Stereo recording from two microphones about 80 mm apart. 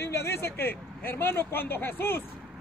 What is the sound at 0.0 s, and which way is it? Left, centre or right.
Speech, left.